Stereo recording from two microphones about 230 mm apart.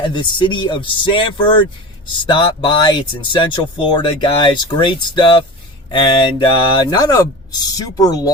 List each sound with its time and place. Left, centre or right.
0.0 s speech: centre